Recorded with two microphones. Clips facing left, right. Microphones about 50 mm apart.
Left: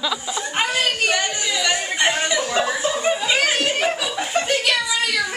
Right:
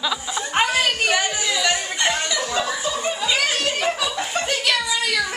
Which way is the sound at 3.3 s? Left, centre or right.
Left.